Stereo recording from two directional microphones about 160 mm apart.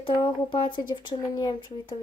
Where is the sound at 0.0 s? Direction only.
30° left (ahead or behind).